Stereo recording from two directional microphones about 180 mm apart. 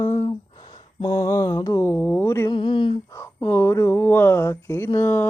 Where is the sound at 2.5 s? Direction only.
25° left (ahead or behind).